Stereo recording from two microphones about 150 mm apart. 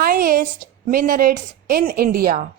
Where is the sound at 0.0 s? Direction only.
80° right.